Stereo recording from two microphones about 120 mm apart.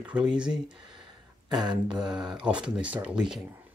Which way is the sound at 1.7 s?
40° right (ahead or behind).